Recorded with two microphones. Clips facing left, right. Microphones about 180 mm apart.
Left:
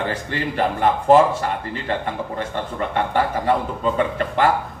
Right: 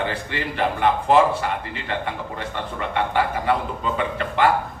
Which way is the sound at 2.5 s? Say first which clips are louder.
Left 1 dB; 45° left (ahead or behind).